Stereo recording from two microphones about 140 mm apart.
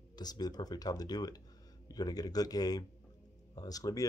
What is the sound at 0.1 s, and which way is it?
Speech, 30° left (ahead or behind).